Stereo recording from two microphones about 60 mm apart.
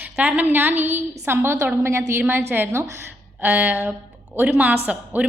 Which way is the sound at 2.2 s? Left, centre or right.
Right.